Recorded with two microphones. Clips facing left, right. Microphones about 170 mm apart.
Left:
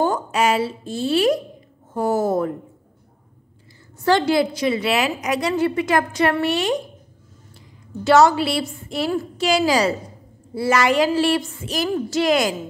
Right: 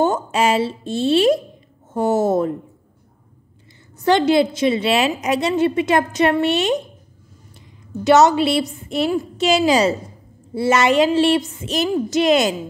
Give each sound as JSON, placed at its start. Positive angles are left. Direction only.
{"t": 0.0, "sound": "a woman's voice", "side_deg": -25}
{"t": 4.0, "sound": "a woman's voice", "side_deg": -20}
{"t": 8.0, "sound": "a woman's voice", "side_deg": -20}